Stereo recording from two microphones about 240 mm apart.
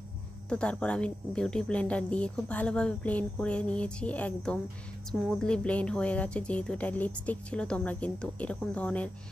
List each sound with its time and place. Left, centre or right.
0.5 s speech: centre